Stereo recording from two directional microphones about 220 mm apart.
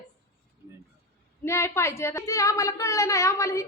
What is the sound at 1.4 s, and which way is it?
A woman's voice, 10° left (ahead or behind).